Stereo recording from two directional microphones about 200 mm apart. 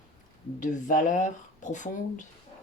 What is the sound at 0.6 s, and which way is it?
Speech, 40° left (ahead or behind).